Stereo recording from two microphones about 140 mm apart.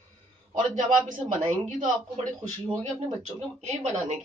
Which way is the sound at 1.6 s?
60° right (ahead or behind).